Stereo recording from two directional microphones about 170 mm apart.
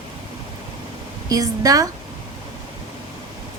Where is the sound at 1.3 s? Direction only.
20° right (ahead or behind).